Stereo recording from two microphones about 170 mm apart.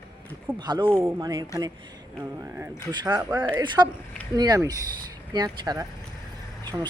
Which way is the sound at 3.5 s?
25° right (ahead or behind).